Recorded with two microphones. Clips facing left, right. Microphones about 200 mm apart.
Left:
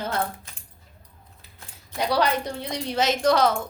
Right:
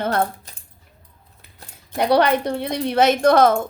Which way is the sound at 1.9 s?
60° right (ahead or behind).